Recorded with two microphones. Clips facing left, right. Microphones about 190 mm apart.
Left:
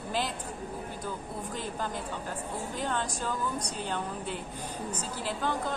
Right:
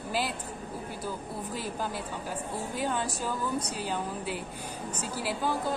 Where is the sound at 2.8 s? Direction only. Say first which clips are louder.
Right 2 dB; 10° right (ahead or behind).